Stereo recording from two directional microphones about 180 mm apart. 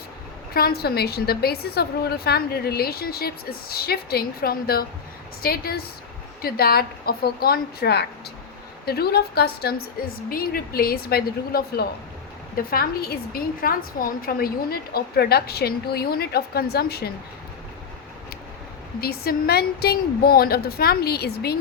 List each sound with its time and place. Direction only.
0.5 s a woman's voice: 60° left (ahead or behind)
18.9 s a woman's voice: 55° left (ahead or behind)